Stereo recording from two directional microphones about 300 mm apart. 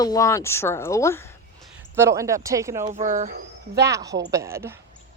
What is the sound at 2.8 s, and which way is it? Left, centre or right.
Speech, right.